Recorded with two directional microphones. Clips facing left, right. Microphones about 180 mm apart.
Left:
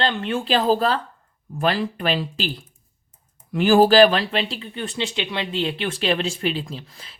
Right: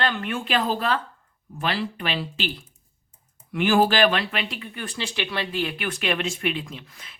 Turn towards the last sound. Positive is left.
turn(degrees=35)  # may be behind; listen again after turning